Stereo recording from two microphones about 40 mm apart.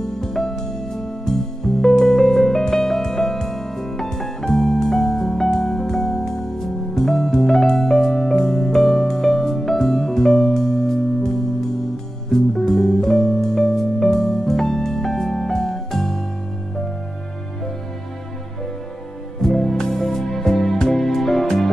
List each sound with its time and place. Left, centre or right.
0.0 s music: centre
19.4 s music: centre